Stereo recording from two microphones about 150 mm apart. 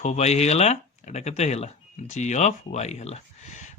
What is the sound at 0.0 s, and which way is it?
Speech, 45° left (ahead or behind).